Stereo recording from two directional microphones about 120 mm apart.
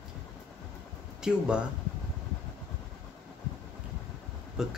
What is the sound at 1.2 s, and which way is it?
Speech, 10° right (ahead or behind).